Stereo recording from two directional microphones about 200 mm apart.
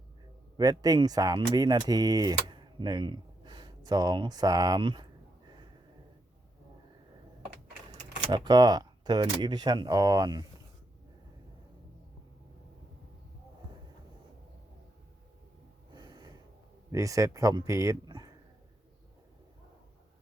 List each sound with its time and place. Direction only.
0.5 s speech: 20° right (ahead or behind)
8.3 s speech: 20° right (ahead or behind)
15.9 s snort: 20° right (ahead or behind)
16.9 s speech: 15° right (ahead or behind)